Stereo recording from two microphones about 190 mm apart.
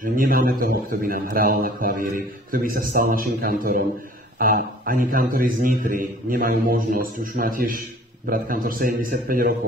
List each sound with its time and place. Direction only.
0.0 s a man's voice: 45° right (ahead or behind)